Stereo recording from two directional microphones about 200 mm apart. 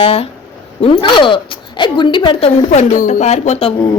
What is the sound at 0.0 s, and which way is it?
A woman's voice, 30° left (ahead or behind).